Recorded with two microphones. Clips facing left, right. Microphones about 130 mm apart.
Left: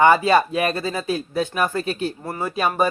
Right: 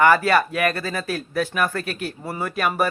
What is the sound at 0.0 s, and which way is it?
Speech, 20° left (ahead or behind).